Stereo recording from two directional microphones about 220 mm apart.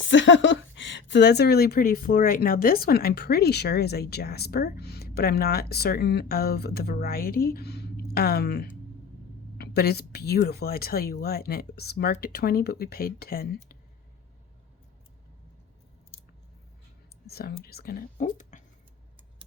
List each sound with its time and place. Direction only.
0.1 s speech: 55° left (ahead or behind)
17.2 s speech: 45° left (ahead or behind)